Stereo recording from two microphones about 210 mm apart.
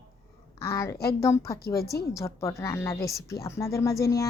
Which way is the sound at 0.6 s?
15° left (ahead or behind).